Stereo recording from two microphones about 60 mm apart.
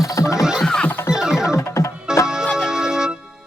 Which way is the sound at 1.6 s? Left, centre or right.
Left.